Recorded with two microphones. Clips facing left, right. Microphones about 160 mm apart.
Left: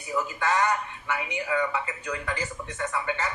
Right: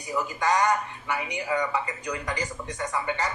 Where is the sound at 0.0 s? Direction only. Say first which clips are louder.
Right 1 dB; 15° right (ahead or behind).